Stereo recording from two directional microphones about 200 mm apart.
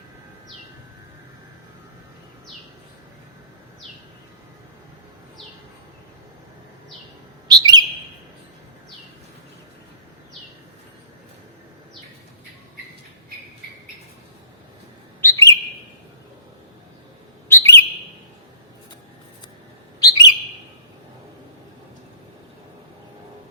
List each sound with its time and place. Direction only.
7.4 s bird: 20° right (ahead or behind)
15.2 s bird: 15° left (ahead or behind)
17.5 s bird: 10° left (ahead or behind)
20.0 s bird: 20° left (ahead or behind)